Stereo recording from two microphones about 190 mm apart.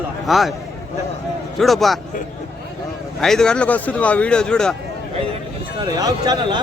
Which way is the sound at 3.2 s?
5° left (ahead or behind).